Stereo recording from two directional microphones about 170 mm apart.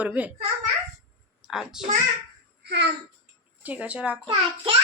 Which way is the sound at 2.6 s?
75° right (ahead or behind).